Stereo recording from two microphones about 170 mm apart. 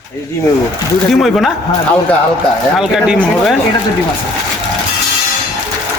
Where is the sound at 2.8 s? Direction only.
5° right (ahead or behind).